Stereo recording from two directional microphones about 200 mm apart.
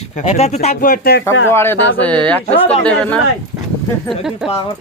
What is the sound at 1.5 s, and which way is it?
Speech, 10° left (ahead or behind).